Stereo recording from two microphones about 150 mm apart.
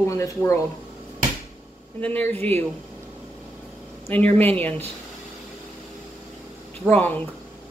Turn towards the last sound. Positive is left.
turn(degrees=10)  # may be behind; listen again after turning